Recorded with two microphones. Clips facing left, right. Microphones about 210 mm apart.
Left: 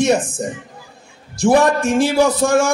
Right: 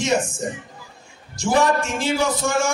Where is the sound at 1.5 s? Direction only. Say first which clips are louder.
Left 5 dB; 60° left (ahead or behind).